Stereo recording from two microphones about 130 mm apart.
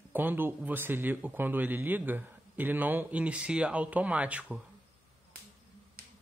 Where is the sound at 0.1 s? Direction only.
15° right (ahead or behind).